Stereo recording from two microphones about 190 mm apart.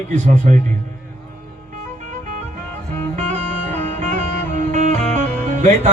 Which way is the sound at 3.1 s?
40° right (ahead or behind).